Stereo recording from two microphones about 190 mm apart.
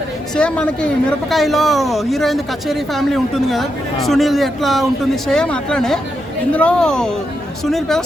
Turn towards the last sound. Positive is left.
turn(degrees=0)  # may be behind; listen again after turning